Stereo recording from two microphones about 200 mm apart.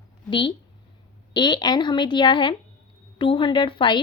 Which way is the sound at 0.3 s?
25° left (ahead or behind).